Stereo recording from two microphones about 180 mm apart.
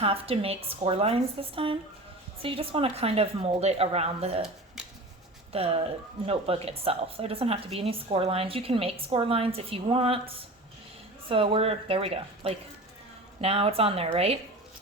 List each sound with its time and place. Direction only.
0.0 s speech: 35° right (ahead or behind)
4.4 s a sound: 5° right (ahead or behind)
5.5 s speech: 35° right (ahead or behind)